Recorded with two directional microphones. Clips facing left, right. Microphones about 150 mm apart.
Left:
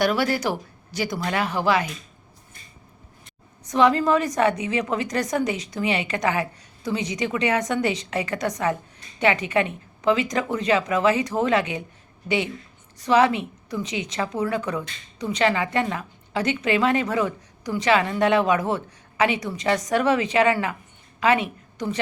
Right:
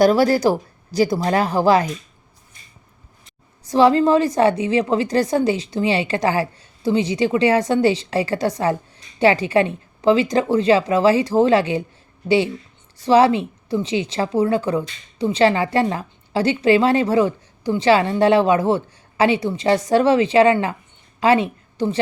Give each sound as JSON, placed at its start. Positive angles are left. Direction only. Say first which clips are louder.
{"t": 0.0, "sound": "a woman's voice", "louder": "right 8 dB", "side_deg": -35}
{"t": 3.6, "sound": "a woman's voice", "louder": "right 5 dB", "side_deg": -30}
{"t": 13.0, "sound": "a woman's voice", "louder": "right 5 dB", "side_deg": -30}